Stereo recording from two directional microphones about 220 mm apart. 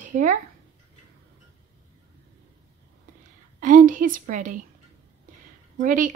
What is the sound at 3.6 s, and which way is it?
A woman's voice, 35° right (ahead or behind).